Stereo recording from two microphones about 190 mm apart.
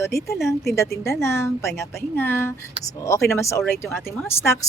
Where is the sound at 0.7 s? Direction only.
15° left (ahead or behind).